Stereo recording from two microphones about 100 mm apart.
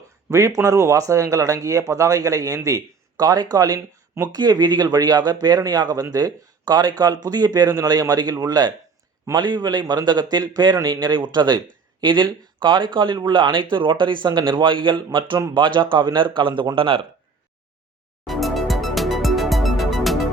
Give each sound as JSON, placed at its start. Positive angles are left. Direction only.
{"t": 0.3, "sound": "a man's voice", "side_deg": -30}
{"t": 18.3, "sound": "music", "side_deg": 0}